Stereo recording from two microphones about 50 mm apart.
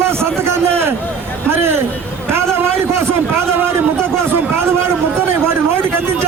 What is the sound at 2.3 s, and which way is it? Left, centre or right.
Vehicle, right.